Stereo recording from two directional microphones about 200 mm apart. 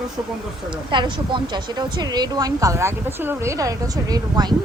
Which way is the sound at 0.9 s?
25° right (ahead or behind).